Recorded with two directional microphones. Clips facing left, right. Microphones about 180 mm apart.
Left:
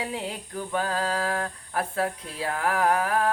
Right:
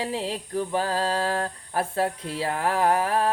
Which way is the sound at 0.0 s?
30° right (ahead or behind).